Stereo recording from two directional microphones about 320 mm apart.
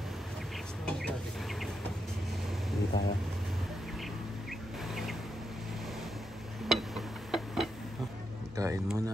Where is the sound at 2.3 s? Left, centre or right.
Centre.